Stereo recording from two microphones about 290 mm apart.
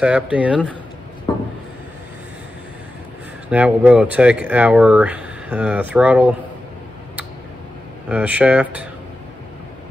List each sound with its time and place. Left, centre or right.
0.0 s speech: centre
1.3 s a sound: centre
3.4 s speech: centre
8.1 s speech: centre